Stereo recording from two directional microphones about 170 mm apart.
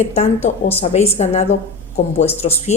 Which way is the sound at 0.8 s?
40° left (ahead or behind).